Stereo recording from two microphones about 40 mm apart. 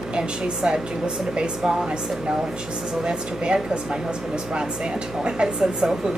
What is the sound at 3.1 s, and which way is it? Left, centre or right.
Speech, right.